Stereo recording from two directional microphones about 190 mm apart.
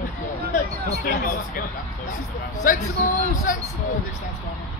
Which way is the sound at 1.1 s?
50° left (ahead or behind).